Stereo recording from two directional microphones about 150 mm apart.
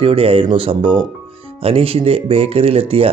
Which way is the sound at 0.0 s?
40° right (ahead or behind).